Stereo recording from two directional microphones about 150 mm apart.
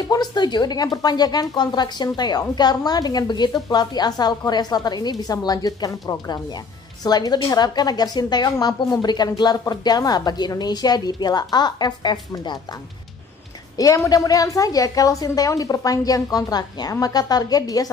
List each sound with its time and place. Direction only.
0.1 s a woman's voice: 30° left (ahead or behind)
13.7 s a woman's voice: 25° left (ahead or behind)